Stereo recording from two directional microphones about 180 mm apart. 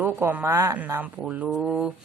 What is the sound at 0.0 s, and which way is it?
Speech, 10° right (ahead or behind).